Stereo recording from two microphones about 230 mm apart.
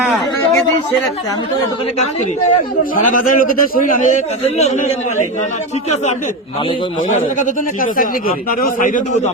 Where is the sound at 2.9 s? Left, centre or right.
Left.